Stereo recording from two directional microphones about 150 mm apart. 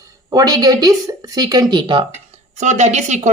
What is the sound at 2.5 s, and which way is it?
Speech, 50° right (ahead or behind).